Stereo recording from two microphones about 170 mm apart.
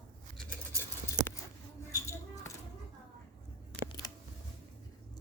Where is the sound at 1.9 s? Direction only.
15° left (ahead or behind).